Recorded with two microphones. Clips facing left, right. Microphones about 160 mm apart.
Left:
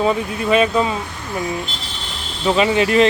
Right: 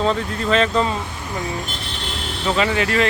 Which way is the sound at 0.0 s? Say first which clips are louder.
Left 2 dB; 10° left (ahead or behind).